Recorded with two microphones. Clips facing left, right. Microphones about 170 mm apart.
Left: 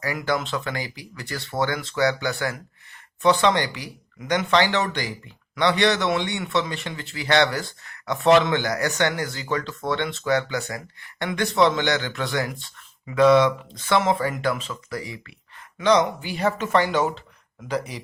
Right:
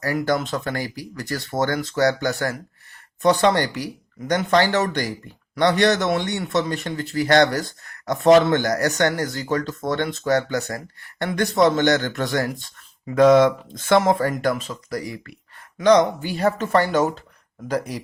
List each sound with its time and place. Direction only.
0.0 s speech: 45° right (ahead or behind)